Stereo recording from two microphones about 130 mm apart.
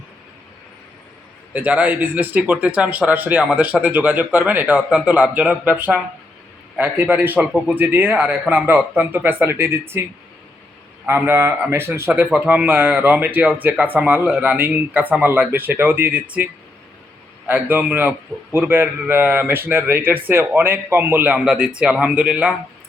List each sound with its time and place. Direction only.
1.5 s speech: 10° right (ahead or behind)
11.0 s speech: 15° right (ahead or behind)
17.4 s speech: 15° right (ahead or behind)